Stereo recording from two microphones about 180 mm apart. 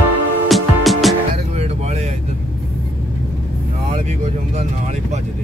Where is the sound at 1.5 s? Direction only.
35° right (ahead or behind).